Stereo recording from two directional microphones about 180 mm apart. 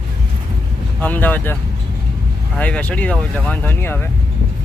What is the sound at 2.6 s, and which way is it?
Speech, 5° left (ahead or behind).